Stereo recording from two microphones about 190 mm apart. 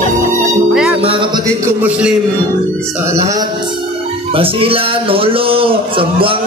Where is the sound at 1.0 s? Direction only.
25° right (ahead or behind).